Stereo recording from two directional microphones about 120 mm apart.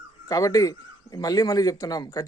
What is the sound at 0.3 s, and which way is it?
A man's voice, 30° left (ahead or behind).